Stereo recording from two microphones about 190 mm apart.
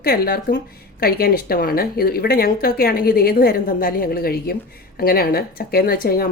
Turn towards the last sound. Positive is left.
turn(degrees=50)  # may be behind; listen again after turning